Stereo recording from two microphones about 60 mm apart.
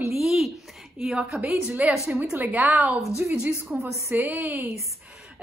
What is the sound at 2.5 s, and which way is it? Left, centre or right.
Speech, right.